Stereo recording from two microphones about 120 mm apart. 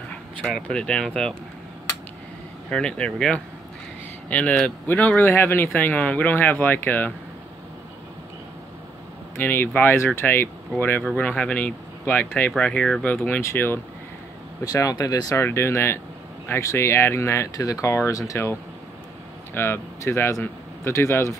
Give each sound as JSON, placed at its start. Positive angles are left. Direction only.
{"t": 0.4, "sound": "speech", "side_deg": 10}
{"t": 2.7, "sound": "speech", "side_deg": 10}
{"t": 9.4, "sound": "speech", "side_deg": 15}
{"t": 14.6, "sound": "speech", "side_deg": 30}